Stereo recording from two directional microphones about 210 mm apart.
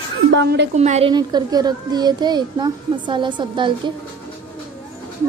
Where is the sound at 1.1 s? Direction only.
20° right (ahead or behind).